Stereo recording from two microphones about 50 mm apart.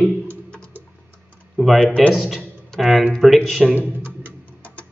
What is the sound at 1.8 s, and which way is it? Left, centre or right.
Speech, centre.